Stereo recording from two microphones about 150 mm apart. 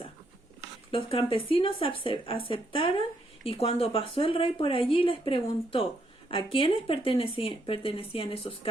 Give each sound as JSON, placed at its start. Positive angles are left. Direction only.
{"t": 0.9, "sound": "speech", "side_deg": 40}